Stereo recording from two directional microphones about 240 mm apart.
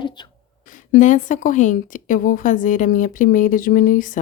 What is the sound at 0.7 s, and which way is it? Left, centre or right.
A woman's voice, left.